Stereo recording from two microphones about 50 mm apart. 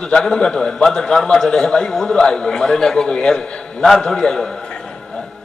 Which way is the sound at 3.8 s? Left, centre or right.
Centre.